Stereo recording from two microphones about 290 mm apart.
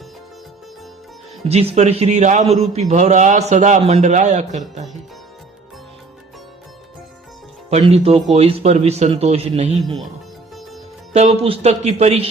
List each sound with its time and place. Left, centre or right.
1.5 s a man's voice: right
7.7 s a man's voice: right
11.1 s a man's voice: right